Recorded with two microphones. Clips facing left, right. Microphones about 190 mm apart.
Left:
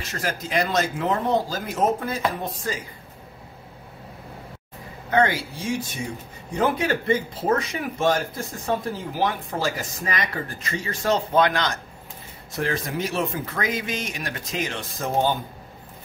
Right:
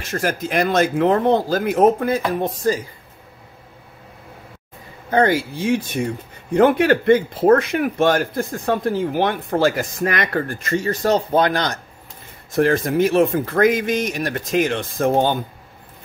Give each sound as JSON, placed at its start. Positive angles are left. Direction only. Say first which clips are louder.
{"t": 0.1, "sound": "speech", "louder": "right 5 dB", "side_deg": -50}
{"t": 5.1, "sound": "speech", "louder": "right 4 dB", "side_deg": -40}
{"t": 5.6, "sound": "speech", "louder": "right 8 dB", "side_deg": -60}
{"t": 12.5, "sound": "speech", "louder": "right 10 dB", "side_deg": -50}